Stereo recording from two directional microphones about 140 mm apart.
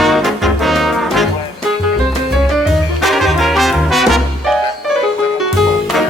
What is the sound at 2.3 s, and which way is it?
Music, centre (ahead or behind).